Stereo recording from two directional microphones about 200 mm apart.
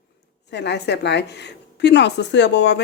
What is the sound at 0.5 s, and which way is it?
Speech, 60° left (ahead or behind).